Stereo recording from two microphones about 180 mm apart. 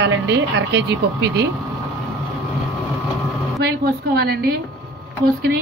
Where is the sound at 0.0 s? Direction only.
80° right.